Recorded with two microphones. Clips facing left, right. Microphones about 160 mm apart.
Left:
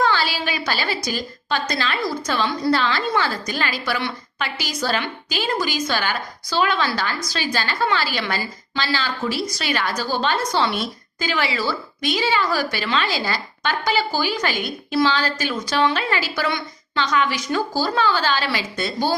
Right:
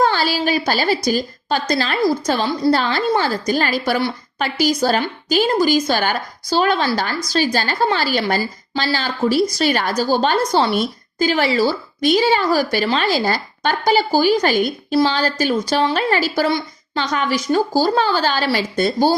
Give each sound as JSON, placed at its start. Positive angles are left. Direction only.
{"t": 0.0, "sound": "a woman's voice", "side_deg": -40}